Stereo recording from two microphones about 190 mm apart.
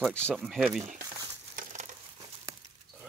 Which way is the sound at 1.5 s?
40° right (ahead or behind).